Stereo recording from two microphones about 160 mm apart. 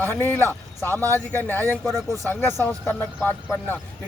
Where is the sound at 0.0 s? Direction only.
15° left (ahead or behind).